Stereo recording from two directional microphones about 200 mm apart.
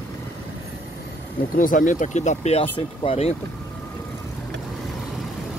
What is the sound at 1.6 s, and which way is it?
Speech, 40° left (ahead or behind).